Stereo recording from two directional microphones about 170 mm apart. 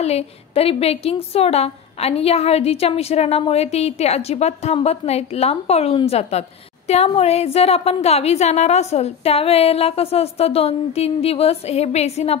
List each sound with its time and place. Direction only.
0.0 s a woman's voice: 35° left (ahead or behind)